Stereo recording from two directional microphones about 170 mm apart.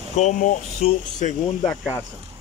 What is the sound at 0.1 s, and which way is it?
Speech, 45° left (ahead or behind).